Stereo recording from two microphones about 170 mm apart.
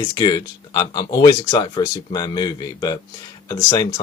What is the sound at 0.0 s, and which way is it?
Speech, 25° left (ahead or behind).